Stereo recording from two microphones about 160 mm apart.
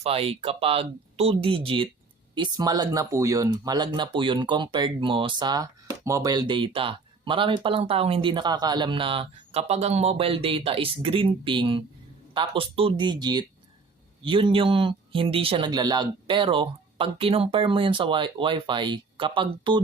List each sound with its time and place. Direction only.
0.0 s speech: 35° right (ahead or behind)